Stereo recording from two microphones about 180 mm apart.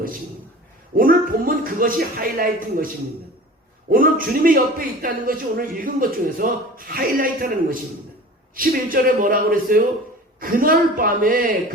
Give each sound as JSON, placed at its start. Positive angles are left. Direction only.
{"t": 0.9, "sound": "speech", "side_deg": -50}
{"t": 3.9, "sound": "speech", "side_deg": -50}